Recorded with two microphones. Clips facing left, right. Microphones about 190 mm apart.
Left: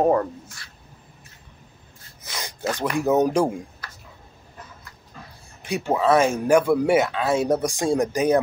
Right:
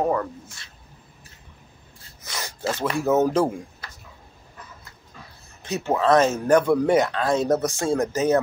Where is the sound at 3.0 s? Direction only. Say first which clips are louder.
Left 1 dB; 15° left (ahead or behind).